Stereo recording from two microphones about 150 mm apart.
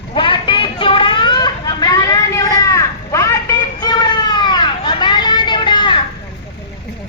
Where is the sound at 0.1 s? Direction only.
35° left (ahead or behind).